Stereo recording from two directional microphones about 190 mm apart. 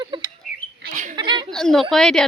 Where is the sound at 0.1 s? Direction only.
25° right (ahead or behind).